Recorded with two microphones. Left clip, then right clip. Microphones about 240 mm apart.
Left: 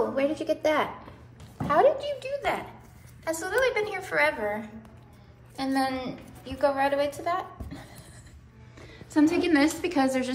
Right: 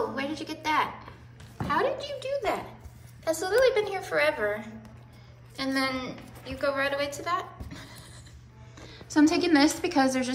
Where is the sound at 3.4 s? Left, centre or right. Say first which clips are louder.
Right 2 dB; centre.